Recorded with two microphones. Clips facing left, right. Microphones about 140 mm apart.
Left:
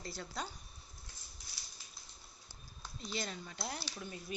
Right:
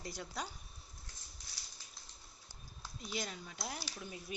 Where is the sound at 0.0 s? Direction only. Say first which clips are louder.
Even; 15° right (ahead or behind).